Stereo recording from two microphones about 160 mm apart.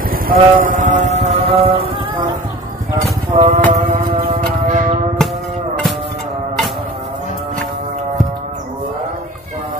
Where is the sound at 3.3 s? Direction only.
45° right (ahead or behind).